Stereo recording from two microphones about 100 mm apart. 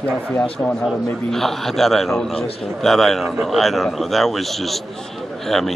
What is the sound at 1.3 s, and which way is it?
Speech, 5° left (ahead or behind).